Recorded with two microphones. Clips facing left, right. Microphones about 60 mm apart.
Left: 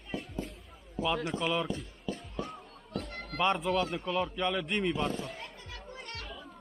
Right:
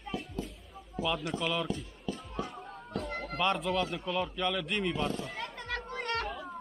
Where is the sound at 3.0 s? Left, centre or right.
Right.